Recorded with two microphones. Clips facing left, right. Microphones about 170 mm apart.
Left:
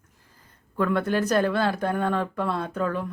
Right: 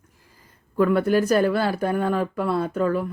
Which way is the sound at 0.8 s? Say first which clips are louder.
Right 5 dB; 10° right (ahead or behind).